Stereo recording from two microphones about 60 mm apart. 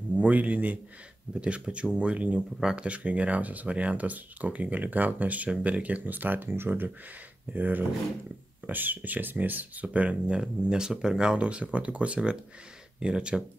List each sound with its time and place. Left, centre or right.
0.1 s a man's voice: right